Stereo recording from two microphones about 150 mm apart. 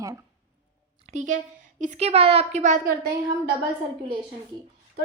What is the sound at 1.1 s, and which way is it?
A woman's voice, 55° right (ahead or behind).